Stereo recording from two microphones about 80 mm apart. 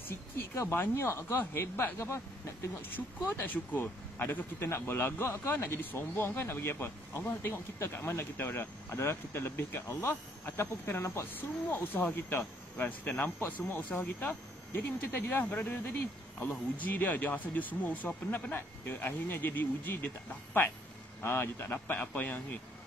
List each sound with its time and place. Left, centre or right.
0.1 s speech: left
2.9 s speech: left
21.2 s speech: left